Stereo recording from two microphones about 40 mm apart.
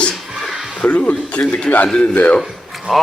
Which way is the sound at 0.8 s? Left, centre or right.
Left.